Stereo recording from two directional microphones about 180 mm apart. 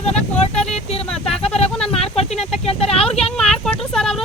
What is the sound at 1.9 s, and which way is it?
Vehicle, 35° left (ahead or behind).